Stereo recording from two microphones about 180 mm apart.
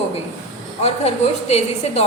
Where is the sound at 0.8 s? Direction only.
35° left (ahead or behind).